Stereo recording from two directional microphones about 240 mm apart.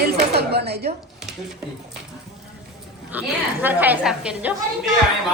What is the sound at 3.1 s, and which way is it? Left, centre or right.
A woman's voice, centre.